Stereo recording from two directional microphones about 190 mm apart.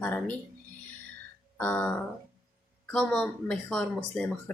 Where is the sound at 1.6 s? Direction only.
5° left (ahead or behind).